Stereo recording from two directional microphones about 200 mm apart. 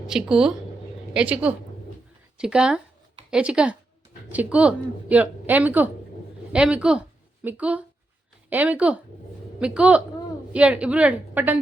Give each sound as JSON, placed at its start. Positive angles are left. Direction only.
{"t": 0.1, "sound": "speech", "side_deg": -5}